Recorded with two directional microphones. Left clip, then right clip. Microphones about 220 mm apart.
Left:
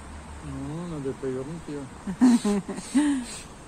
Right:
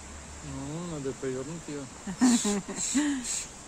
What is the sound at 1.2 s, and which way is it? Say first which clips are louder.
Speech: left 3 dB; 55° right (ahead or behind).